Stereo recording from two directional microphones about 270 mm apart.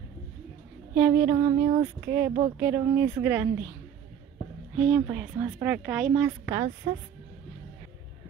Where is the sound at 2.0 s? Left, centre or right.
Centre.